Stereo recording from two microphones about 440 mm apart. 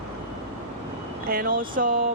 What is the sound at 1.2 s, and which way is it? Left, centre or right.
Speech, centre.